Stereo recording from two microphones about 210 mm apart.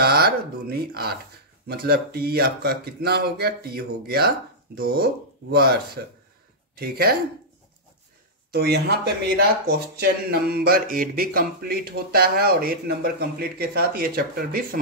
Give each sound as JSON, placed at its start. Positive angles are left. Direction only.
{"t": 0.0, "sound": "speech", "side_deg": -50}
{"t": 8.5, "sound": "speech", "side_deg": -50}